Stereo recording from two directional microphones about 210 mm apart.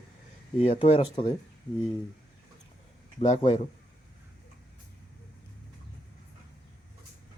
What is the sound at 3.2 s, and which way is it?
Speech, 25° left (ahead or behind).